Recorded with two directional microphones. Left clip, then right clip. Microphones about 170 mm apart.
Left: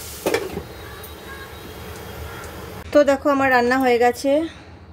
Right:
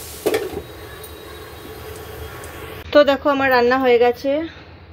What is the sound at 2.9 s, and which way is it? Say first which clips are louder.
A woman's voice: right 2 dB; 10° left (ahead or behind).